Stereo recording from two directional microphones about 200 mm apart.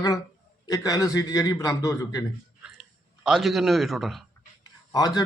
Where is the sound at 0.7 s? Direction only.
20° left (ahead or behind).